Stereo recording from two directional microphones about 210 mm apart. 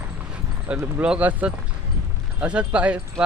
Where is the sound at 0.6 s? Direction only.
5° right (ahead or behind).